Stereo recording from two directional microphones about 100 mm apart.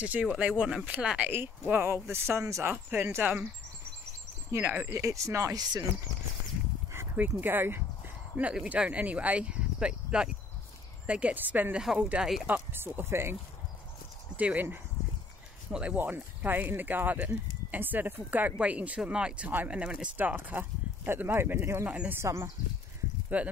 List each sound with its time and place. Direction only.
0.0 s speech: 10° right (ahead or behind); by 2.7 s 30° right (ahead or behind)
2.7 s speech: 20° right (ahead or behind)
4.5 s speech: 25° right (ahead or behind); by 5.9 s 40° right (ahead or behind)
6.9 s speech: 20° right (ahead or behind); by 12.4 s 5° right (ahead or behind)
12.7 s speech: 20° right (ahead or behind)
22.2 s speech: 25° right (ahead or behind)
23.3 s speech: 15° right (ahead or behind)